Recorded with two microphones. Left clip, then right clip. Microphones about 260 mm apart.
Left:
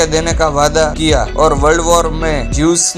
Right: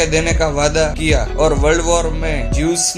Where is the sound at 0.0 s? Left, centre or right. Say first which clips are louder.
Left 3 dB; left.